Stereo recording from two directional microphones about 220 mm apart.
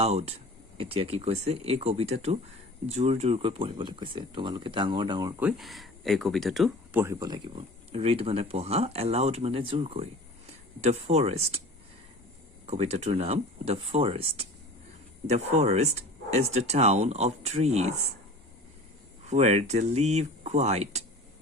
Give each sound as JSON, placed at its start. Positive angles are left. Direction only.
{"t": 0.0, "sound": "speech", "side_deg": -25}
{"t": 5.4, "sound": "speech", "side_deg": -5}
{"t": 7.0, "sound": "speech", "side_deg": -15}
{"t": 12.6, "sound": "speech", "side_deg": -30}
{"t": 19.3, "sound": "speech", "side_deg": -30}